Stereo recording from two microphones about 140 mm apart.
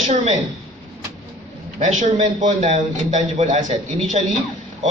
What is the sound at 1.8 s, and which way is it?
A man's voice, 60° right (ahead or behind).